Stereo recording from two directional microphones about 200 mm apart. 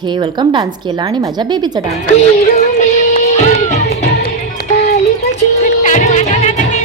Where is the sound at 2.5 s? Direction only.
35° left (ahead or behind).